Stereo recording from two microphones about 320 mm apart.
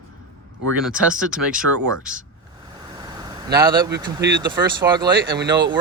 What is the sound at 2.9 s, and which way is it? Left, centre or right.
Vehicle, centre.